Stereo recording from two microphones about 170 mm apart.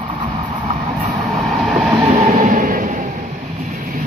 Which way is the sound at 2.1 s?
40° right (ahead or behind).